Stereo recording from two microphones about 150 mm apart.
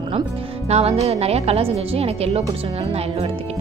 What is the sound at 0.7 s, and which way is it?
Speech, 45° right (ahead or behind).